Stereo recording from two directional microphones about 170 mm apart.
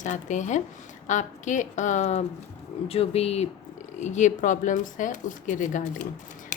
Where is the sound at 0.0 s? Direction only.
45° left (ahead or behind).